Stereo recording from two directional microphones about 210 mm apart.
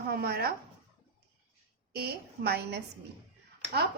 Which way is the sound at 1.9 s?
50° right (ahead or behind).